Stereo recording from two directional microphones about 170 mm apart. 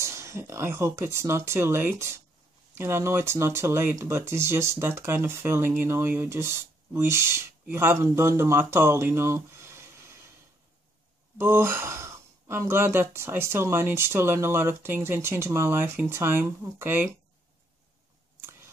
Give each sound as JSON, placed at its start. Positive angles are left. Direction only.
{"t": 0.0, "sound": "speech", "side_deg": -15}
{"t": 11.3, "sound": "speech", "side_deg": -15}